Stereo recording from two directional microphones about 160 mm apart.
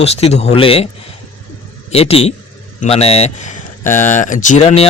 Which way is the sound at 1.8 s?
40° left (ahead or behind).